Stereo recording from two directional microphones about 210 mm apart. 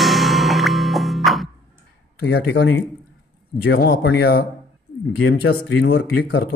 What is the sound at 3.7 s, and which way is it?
Speech, 50° left (ahead or behind).